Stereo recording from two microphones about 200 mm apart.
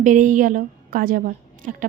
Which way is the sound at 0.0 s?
40° right (ahead or behind).